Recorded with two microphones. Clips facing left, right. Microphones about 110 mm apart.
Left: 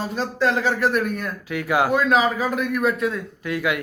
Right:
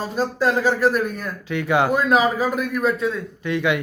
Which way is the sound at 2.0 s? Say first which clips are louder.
Right 1 dB; 5° right (ahead or behind).